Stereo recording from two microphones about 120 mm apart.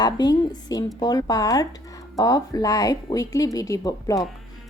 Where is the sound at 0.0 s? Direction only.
35° left (ahead or behind).